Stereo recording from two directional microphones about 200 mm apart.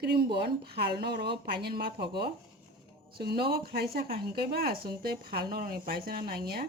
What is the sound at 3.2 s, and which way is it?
Speech, 50° right (ahead or behind).